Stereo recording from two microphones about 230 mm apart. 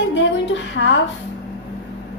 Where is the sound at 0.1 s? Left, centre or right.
Left.